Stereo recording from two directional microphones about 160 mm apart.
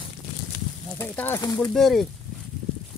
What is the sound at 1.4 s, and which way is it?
Speech, 25° left (ahead or behind).